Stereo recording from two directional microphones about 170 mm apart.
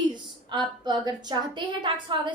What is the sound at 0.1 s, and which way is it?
A woman's voice, 25° right (ahead or behind).